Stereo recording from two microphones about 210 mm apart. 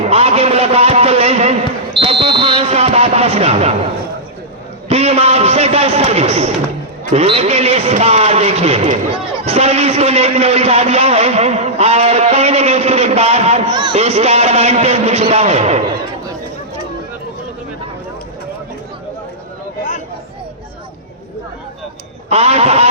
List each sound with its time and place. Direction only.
0.1 s a sound: 30° right (ahead or behind)
4.9 s a man's voice: 30° right (ahead or behind)
22.3 s speech: 30° right (ahead or behind)